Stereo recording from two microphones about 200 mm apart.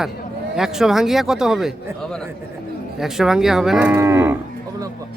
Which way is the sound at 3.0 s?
Centre (ahead or behind).